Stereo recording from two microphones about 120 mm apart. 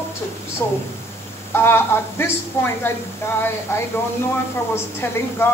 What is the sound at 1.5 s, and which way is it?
A woman's voice, 20° left (ahead or behind).